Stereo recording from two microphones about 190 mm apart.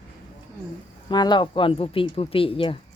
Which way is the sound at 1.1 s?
20° left (ahead or behind).